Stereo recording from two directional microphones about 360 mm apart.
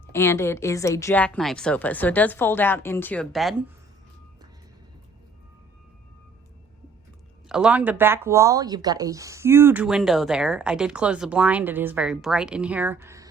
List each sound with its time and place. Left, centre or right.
0.1 s speech: centre
7.4 s speech: centre